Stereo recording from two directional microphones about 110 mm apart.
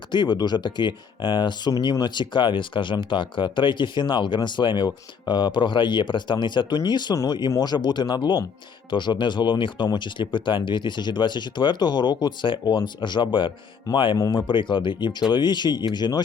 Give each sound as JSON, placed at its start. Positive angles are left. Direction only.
{"t": 0.1, "sound": "speech", "side_deg": 45}